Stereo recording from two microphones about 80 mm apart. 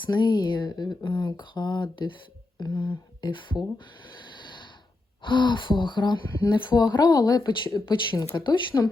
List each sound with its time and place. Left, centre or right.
0.0 s speech: left
2.6 s speech: left
4.1 s a sound: left
5.2 s speech: left
7.9 s speech: left
8.7 s speech: left